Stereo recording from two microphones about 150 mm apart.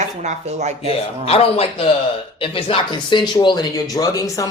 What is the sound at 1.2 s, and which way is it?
A man's voice, 40° left (ahead or behind).